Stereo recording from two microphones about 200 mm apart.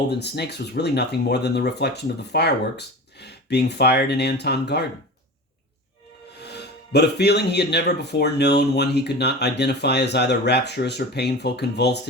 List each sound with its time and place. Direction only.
0.1 s speech: 55° left (ahead or behind)
6.4 s speech: 55° left (ahead or behind)